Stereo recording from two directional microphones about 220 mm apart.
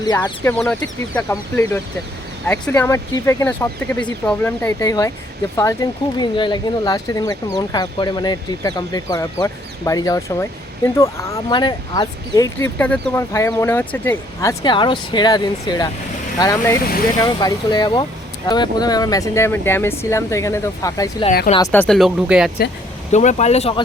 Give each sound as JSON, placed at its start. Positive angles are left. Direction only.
{"t": 0.0, "sound": "speech", "side_deg": 20}
{"t": 0.5, "sound": "speech", "side_deg": 5}
{"t": 21.7, "sound": "speech", "side_deg": 5}
{"t": 23.1, "sound": "speech", "side_deg": 30}